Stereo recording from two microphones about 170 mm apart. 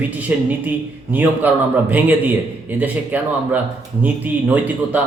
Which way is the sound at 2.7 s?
10° right (ahead or behind).